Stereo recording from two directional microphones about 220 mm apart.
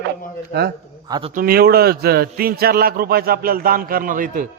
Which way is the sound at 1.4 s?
40° right (ahead or behind).